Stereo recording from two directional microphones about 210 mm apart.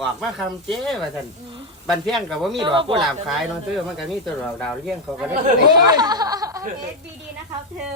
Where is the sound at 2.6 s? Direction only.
25° right (ahead or behind).